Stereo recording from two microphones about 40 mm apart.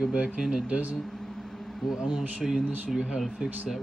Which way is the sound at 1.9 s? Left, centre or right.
Centre.